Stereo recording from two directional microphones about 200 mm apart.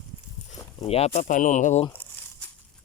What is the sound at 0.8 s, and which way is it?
Speech, 30° left (ahead or behind).